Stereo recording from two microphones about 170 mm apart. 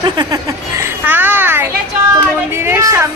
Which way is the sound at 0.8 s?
10° right (ahead or behind).